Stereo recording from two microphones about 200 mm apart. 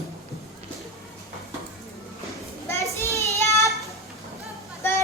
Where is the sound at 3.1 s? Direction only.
15° left (ahead or behind).